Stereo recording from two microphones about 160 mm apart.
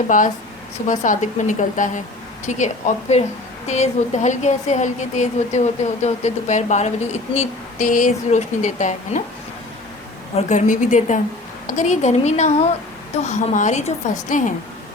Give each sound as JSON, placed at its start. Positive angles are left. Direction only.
{"t": 0.1, "sound": "a woman's voice", "side_deg": 55}
{"t": 10.3, "sound": "a woman's voice", "side_deg": 50}